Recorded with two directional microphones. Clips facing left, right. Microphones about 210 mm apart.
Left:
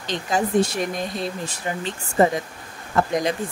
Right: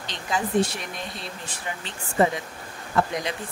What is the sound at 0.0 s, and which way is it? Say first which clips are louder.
Speech: left 5 dB; 45° left (ahead or behind).